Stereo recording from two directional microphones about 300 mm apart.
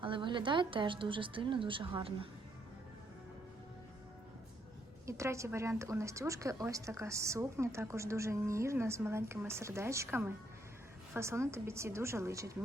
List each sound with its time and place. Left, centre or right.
0.0 s speech: centre
5.0 s speech: centre